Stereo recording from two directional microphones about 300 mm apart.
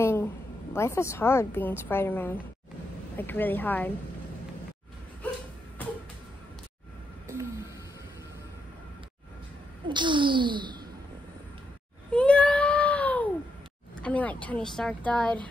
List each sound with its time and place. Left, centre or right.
0.0 s a sound: centre
0.7 s a woman's voice: centre
9.8 s speech: centre
12.1 s baby cry: centre
13.9 s a woman's voice: centre